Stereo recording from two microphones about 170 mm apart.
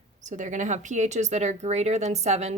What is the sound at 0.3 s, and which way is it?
Speech, 45° right (ahead or behind).